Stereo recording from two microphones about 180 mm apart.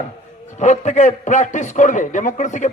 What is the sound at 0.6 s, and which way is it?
A man's voice, 40° left (ahead or behind).